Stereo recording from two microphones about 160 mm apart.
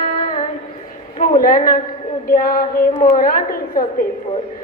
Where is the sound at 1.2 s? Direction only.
60° left (ahead or behind).